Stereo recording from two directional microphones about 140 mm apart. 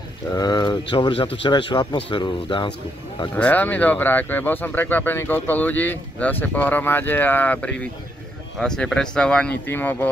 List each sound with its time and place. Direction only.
0.4 s speech: 30° left (ahead or behind)
3.3 s speech: 10° left (ahead or behind)